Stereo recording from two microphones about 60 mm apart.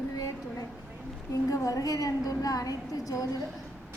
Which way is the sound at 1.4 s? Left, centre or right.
Left.